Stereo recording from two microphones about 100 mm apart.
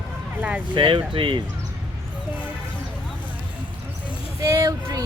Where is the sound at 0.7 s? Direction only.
55° right (ahead or behind).